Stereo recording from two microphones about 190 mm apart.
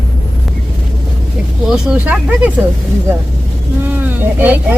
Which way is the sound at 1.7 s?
5° right (ahead or behind).